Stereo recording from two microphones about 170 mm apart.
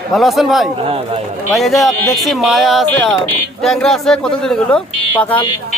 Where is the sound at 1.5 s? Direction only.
Centre (ahead or behind).